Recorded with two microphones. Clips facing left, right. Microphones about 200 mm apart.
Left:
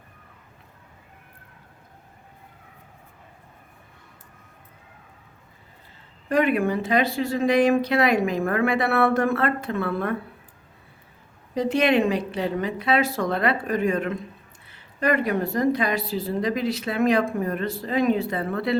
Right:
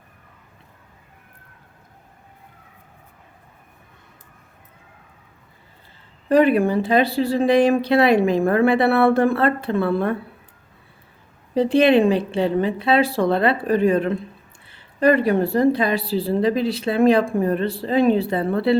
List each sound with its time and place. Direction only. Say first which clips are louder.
6.2 s a woman's voice: right 5 dB; 30° right (ahead or behind)
11.5 s a woman's voice: right 5 dB; 30° right (ahead or behind)